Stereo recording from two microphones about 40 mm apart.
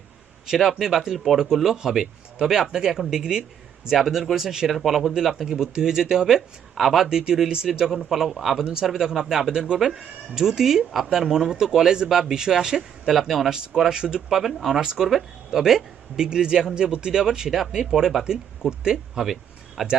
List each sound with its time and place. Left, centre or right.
0.4 s speech: centre
7.1 s a man's voice: centre
8.6 s a man's voice: centre
18.3 s speech: centre